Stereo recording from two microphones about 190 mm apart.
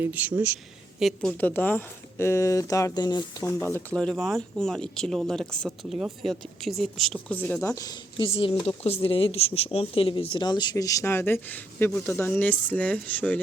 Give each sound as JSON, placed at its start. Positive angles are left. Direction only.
{"t": 0.0, "sound": "speech", "side_deg": -10}
{"t": 1.4, "sound": "speech", "side_deg": 10}
{"t": 7.8, "sound": "speech", "side_deg": 25}